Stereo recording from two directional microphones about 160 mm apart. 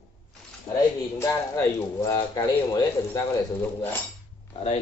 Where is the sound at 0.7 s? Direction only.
30° left (ahead or behind).